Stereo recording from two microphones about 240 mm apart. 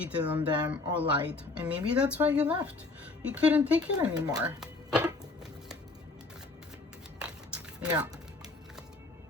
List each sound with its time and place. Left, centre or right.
0.0 s speech: centre
3.9 s speech: centre
4.4 s speech: centre
7.2 s a sound: centre
7.9 s speech: centre